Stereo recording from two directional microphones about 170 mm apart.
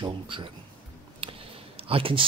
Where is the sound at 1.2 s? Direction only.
35° right (ahead or behind).